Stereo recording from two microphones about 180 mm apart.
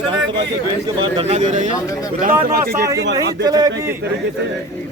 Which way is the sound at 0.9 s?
25° right (ahead or behind).